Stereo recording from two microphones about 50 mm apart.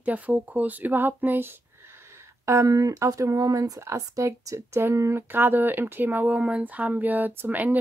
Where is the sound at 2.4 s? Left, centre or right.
Right.